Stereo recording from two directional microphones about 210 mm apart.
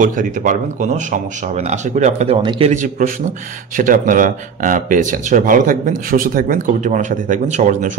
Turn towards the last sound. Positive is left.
turn(degrees=-35)  # may be behind; listen again after turning